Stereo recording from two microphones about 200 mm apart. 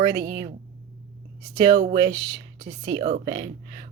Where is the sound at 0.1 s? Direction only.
60° right (ahead or behind).